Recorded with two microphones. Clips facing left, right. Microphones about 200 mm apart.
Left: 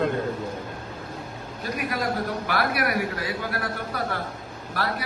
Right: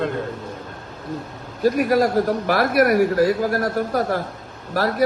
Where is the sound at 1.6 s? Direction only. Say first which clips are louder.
Right 12 dB; 40° right (ahead or behind).